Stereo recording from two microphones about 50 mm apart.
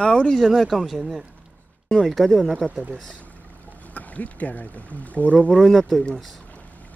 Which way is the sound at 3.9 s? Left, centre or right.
Left.